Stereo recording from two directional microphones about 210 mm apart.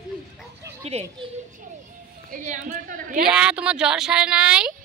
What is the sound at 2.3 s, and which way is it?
Speech, 35° right (ahead or behind).